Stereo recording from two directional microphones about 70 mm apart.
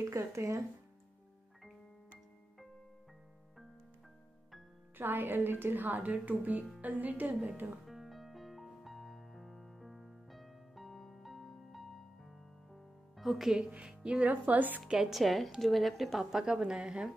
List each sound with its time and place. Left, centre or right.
0.1 s speech: right
4.9 s a woman's voice: right
7.8 s music: centre
13.7 s a woman's voice: centre
14.9 s a woman's voice: centre